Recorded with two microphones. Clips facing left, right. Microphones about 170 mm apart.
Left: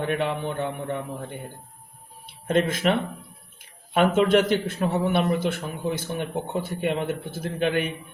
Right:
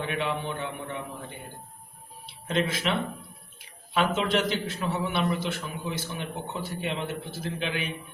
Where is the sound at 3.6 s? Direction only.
50° left (ahead or behind).